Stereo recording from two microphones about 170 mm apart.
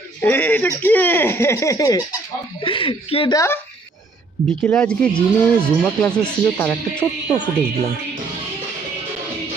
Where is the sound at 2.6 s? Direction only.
30° left (ahead or behind).